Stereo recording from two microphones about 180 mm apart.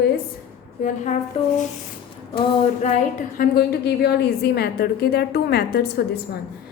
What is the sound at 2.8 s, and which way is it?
A woman's voice, 50° left (ahead or behind).